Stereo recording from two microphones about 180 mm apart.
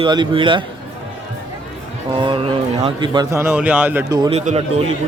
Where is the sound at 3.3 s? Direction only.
10° right (ahead or behind).